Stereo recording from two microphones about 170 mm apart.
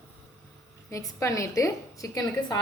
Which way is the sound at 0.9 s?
20° left (ahead or behind).